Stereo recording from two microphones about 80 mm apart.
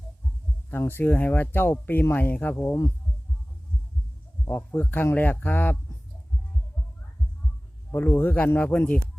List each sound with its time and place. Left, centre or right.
0.7 s speech: left
4.4 s speech: left
7.9 s speech: left